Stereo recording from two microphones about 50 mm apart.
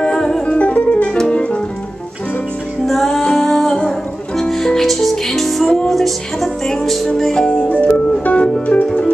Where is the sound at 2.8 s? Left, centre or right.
Centre.